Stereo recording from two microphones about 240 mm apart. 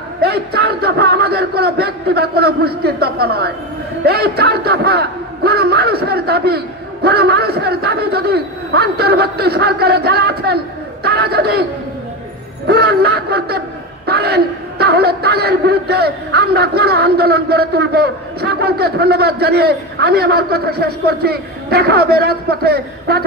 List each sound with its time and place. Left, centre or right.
0.2 s a man's voice: right
12.6 s a sound: right
14.0 s a man's voice: right